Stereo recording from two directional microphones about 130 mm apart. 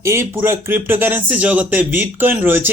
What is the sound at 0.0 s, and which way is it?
Speech, 20° right (ahead or behind).